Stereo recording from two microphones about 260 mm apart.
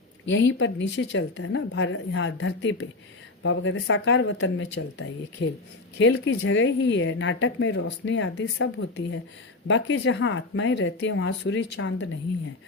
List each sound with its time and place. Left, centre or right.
0.3 s a woman's voice: left